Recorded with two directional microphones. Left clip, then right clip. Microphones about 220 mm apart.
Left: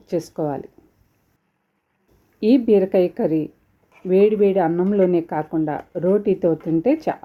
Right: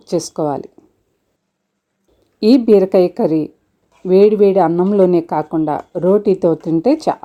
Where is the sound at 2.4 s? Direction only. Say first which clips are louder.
Right 6 dB; 20° right (ahead or behind).